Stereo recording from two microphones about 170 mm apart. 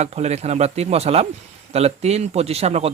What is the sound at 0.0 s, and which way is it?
A man's voice, 40° right (ahead or behind).